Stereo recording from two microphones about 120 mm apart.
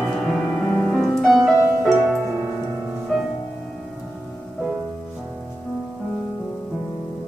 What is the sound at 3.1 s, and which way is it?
Music, centre (ahead or behind).